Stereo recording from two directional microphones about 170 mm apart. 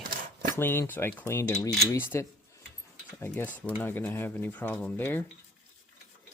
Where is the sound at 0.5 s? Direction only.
15° left (ahead or behind).